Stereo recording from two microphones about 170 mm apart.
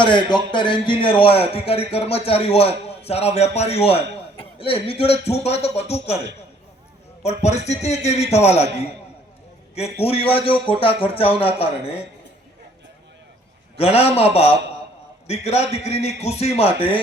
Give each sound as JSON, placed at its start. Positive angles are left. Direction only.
{"t": 0.0, "sound": "a man's voice", "side_deg": 30}
{"t": 7.3, "sound": "a man's voice", "side_deg": 40}
{"t": 10.0, "sound": "a man's voice", "side_deg": 35}
{"t": 13.7, "sound": "a man's voice", "side_deg": 35}